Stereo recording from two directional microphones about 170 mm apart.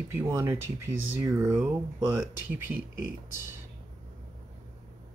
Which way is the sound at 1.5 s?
10° right (ahead or behind).